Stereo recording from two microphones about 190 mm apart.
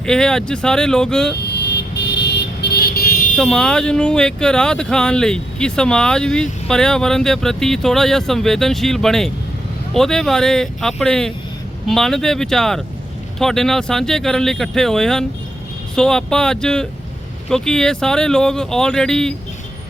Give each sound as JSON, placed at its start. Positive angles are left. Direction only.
{"t": 0.0, "sound": "speech", "side_deg": 5}
{"t": 1.6, "sound": "vehicle", "side_deg": 65}
{"t": 3.3, "sound": "speech", "side_deg": 5}